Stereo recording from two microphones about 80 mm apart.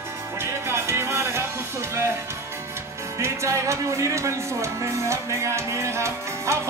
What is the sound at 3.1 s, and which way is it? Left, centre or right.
Music, right.